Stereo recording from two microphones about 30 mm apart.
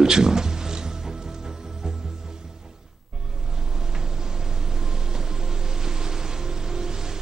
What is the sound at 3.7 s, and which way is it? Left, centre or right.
Music, right.